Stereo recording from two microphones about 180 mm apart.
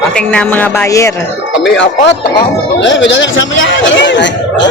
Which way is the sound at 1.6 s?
85° left.